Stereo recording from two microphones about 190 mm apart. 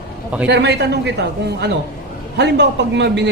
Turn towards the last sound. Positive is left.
turn(degrees=-65)  # may be behind; listen again after turning